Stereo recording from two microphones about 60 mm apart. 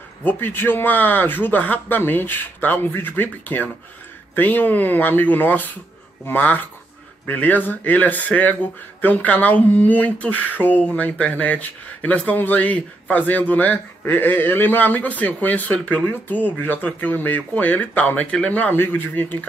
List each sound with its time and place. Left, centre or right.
0.2 s a man's voice: left